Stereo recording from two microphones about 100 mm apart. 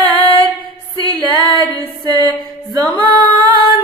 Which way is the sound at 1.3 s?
45° right (ahead or behind).